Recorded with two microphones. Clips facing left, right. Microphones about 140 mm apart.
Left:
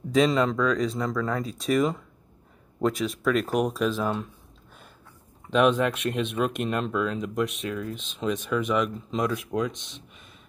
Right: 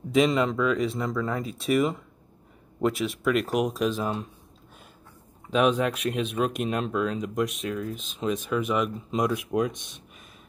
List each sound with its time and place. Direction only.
0.1 s speech: 10° right (ahead or behind)
5.5 s speech: centre (ahead or behind)
9.8 s speech: 50° right (ahead or behind)